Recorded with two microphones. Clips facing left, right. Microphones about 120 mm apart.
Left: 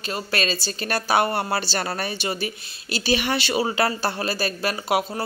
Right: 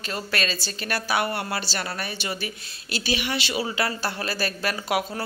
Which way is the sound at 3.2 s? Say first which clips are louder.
Left 4 dB; 40° left (ahead or behind).